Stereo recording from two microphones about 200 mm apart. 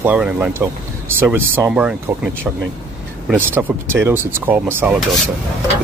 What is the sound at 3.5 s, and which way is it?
Speech, 10° right (ahead or behind).